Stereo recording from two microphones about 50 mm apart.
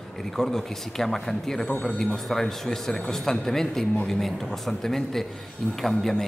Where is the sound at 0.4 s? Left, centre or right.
Centre.